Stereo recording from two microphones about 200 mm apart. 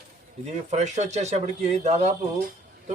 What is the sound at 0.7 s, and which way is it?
Speech, 35° right (ahead or behind).